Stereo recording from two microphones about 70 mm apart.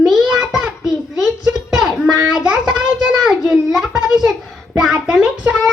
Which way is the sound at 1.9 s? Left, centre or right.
Centre.